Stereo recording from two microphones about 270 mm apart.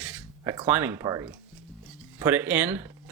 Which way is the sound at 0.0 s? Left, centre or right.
Centre.